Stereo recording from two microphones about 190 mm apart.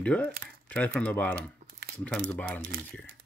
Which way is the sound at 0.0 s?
5° left (ahead or behind).